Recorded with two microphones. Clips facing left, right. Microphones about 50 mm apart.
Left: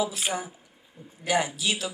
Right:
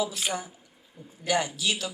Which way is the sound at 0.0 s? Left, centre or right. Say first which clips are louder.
Left 1 dB; centre.